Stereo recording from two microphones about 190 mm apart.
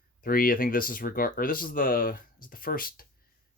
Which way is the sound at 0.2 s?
50° left (ahead or behind).